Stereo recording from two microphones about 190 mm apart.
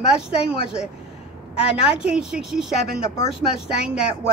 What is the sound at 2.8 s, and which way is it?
Speech, 50° right (ahead or behind).